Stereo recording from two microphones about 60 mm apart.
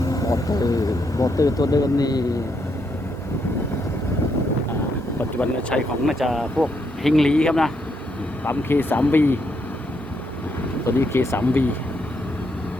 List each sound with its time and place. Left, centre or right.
0.0 s speech: left
5.1 s speech: left
6.1 s speech: centre
8.4 s speech: left
10.8 s speech: left
11.3 s speech: left